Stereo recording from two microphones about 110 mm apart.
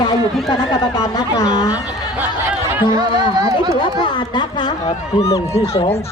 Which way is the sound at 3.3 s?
35° right (ahead or behind).